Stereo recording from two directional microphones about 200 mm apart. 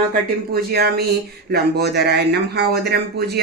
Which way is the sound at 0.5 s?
50° right (ahead or behind).